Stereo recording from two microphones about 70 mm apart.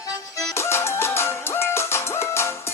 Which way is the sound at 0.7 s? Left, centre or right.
Left.